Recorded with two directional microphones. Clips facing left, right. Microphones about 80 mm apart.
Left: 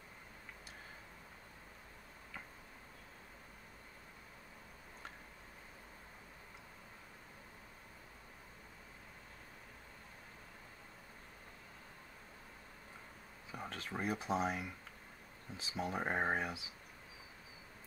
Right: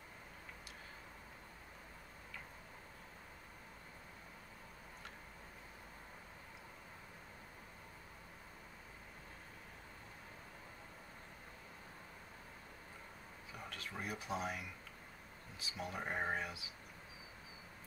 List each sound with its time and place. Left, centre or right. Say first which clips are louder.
13.5 s speech: left 5 dB; left